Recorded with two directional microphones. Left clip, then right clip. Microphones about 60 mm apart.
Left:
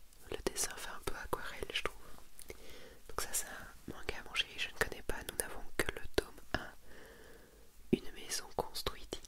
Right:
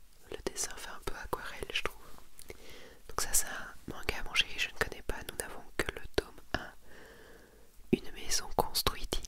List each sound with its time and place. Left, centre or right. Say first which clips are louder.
0.3 s whispering: even; centre
2.4 s a sound: right 2 dB; centre
3.2 s whispering: right 6 dB; right
4.7 s whispering: right 2 dB; centre; by 9.2 s right